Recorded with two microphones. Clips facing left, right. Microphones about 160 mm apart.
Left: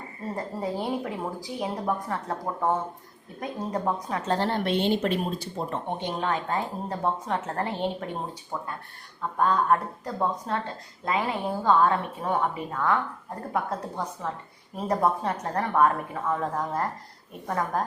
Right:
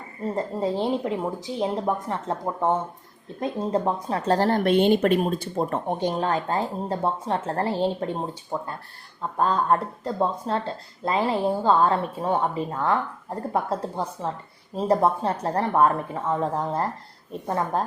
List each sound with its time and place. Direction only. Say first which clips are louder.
0.3 s a woman's voice: right 5 dB; 25° right (ahead or behind)
9.4 s a woman's voice: right 1 dB; 30° right (ahead or behind)